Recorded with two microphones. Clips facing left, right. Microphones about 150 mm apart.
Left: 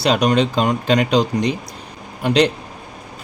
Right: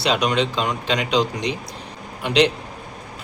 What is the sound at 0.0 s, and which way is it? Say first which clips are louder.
A man's voice: left 4 dB; 45° left (ahead or behind).